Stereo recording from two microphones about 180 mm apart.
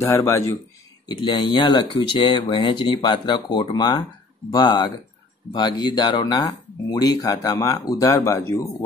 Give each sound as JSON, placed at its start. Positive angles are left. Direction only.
{"t": 0.1, "sound": "speech", "side_deg": 15}
{"t": 1.0, "sound": "speech", "side_deg": 25}